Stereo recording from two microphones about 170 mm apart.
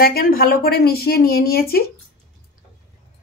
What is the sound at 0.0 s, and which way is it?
Speech, 60° left (ahead or behind).